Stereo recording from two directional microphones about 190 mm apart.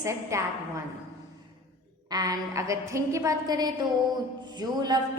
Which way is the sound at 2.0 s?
20° right (ahead or behind).